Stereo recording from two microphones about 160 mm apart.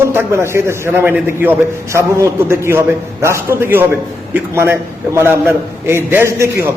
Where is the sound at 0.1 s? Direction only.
15° right (ahead or behind).